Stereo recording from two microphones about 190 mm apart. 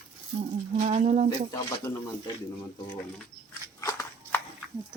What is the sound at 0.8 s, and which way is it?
Speech, 35° right (ahead or behind).